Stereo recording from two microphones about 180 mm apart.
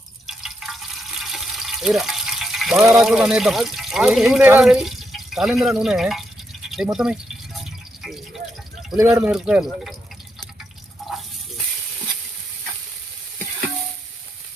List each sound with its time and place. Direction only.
0.3 s drip: centre (ahead or behind)
1.2 s a sound: centre (ahead or behind)
2.8 s speech: 10° right (ahead or behind)
6.7 s a sound: centre (ahead or behind)
9.0 s speech: 15° right (ahead or behind)
9.3 s speech: 5° right (ahead or behind)